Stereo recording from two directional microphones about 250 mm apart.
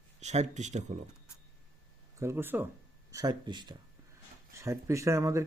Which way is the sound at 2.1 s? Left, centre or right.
Centre.